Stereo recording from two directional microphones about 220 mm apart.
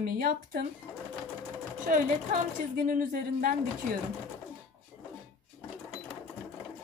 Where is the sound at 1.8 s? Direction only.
35° right (ahead or behind).